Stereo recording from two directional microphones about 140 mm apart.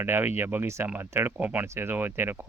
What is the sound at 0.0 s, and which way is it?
Speech, 15° right (ahead or behind).